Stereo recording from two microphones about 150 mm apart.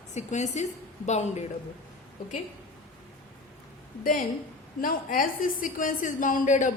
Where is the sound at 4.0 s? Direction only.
65° left (ahead or behind).